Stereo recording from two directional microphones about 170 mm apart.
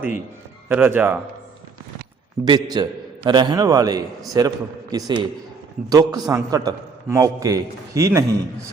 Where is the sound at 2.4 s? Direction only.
20° right (ahead or behind).